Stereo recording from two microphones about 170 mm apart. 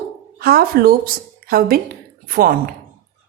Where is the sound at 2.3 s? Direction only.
60° right (ahead or behind).